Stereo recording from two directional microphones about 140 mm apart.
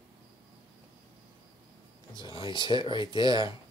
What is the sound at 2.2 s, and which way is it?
Speech, 35° left (ahead or behind).